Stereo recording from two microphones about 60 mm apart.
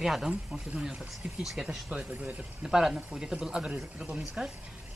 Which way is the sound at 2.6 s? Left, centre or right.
Centre.